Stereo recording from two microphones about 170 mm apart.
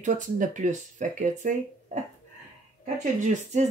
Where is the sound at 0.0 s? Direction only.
45° right (ahead or behind).